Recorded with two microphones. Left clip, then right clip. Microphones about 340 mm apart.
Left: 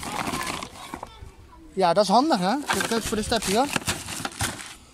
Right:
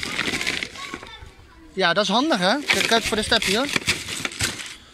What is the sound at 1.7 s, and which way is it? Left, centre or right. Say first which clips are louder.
Speech: left 1 dB; centre.